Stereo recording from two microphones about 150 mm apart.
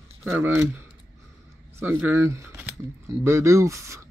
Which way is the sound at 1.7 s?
15° right (ahead or behind).